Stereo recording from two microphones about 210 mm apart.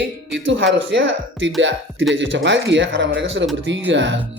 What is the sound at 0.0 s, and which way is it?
Speech, 55° right (ahead or behind).